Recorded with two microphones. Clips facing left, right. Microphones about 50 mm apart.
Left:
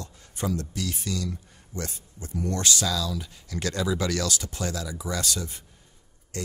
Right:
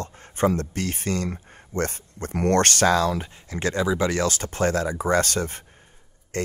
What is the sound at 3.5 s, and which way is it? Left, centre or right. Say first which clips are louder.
Speech: right 4 dB; right.